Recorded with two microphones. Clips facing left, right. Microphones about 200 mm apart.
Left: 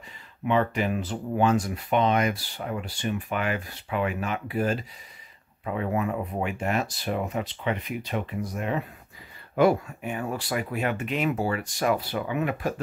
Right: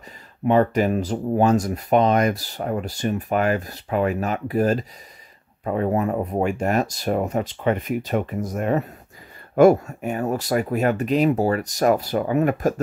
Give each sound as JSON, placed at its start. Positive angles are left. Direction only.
{"t": 0.5, "sound": "speech", "side_deg": -40}